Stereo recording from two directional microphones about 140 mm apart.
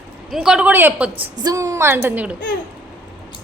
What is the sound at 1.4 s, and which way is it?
Speech, 25° right (ahead or behind).